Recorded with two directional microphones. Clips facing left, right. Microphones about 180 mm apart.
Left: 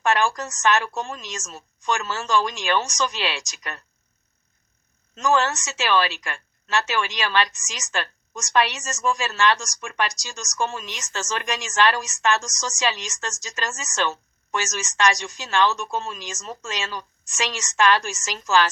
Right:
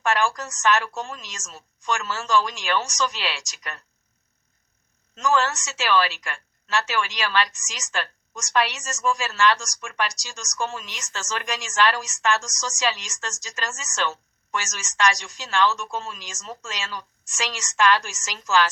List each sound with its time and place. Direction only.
0.0 s a woman's voice: 20° left (ahead or behind)
5.2 s a woman's voice: 20° left (ahead or behind)